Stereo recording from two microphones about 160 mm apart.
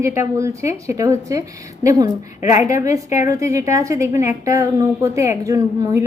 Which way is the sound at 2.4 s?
45° left (ahead or behind).